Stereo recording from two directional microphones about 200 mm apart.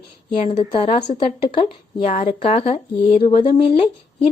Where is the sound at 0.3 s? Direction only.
30° left (ahead or behind).